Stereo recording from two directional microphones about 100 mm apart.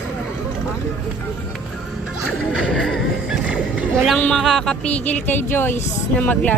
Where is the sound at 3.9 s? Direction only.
5° left (ahead or behind).